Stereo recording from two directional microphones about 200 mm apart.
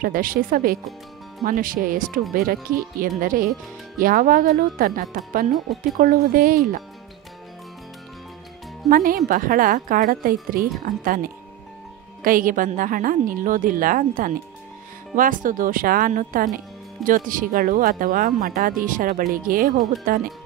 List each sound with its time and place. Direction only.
0.0 s speech: 45° right (ahead or behind)
8.9 s speech: 45° right (ahead or behind)
12.2 s speech: 45° right (ahead or behind)